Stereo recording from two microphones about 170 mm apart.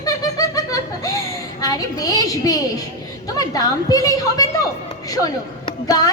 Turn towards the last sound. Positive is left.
turn(degrees=20)  # may be behind; listen again after turning